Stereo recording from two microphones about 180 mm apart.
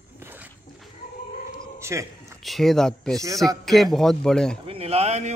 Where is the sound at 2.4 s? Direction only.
Centre (ahead or behind).